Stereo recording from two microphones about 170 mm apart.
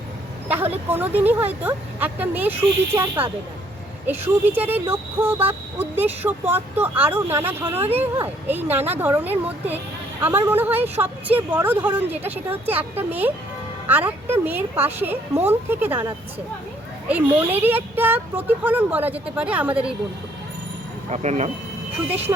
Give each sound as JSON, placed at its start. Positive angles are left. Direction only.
{"t": 0.4, "sound": "speech", "side_deg": -10}
{"t": 17.1, "sound": "speech", "side_deg": -10}
{"t": 21.1, "sound": "speech", "side_deg": -40}